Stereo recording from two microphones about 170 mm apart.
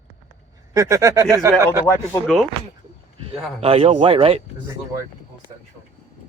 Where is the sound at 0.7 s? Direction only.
20° right (ahead or behind).